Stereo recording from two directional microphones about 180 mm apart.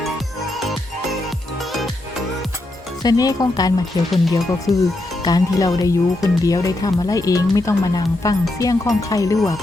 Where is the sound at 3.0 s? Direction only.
20° left (ahead or behind).